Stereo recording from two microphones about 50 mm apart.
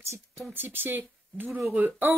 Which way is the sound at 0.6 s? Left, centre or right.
Right.